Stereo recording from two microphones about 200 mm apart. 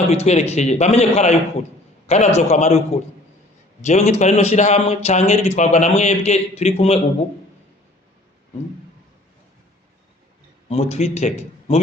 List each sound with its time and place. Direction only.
0.1 s speech: 30° left (ahead or behind)
10.7 s speech: 30° left (ahead or behind)